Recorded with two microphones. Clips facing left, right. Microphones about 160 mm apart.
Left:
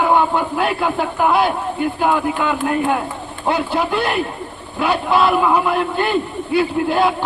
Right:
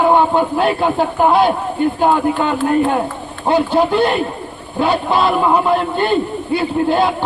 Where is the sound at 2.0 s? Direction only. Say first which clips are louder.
Right 2 dB; 30° right (ahead or behind).